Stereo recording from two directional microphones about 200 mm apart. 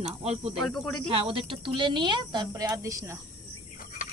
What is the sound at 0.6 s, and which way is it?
Speech, centre (ahead or behind).